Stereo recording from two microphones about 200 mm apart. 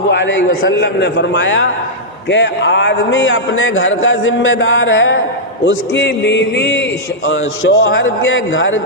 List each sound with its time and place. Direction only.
0.1 s a man's voice: 65° left (ahead or behind)
7.3 s a man's voice: 80° left